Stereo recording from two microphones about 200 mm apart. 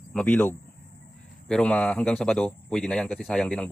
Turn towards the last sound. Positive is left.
turn(degrees=5)  # may be behind; listen again after turning